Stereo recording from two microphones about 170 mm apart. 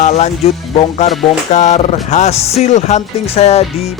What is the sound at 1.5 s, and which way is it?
Music, 45° left (ahead or behind).